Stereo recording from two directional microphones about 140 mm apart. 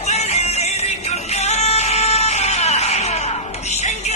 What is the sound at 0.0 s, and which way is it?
Music, 50° left (ahead or behind).